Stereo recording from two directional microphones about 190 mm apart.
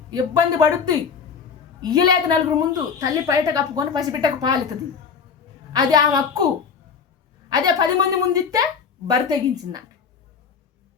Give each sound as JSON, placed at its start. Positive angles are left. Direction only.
{"t": 0.1, "sound": "a woman's voice", "side_deg": -20}
{"t": 5.7, "sound": "a woman's voice", "side_deg": -20}
{"t": 7.5, "sound": "a woman's voice", "side_deg": -20}